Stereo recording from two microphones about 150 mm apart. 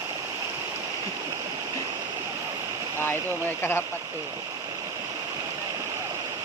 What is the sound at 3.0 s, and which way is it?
Speech, 15° left (ahead or behind).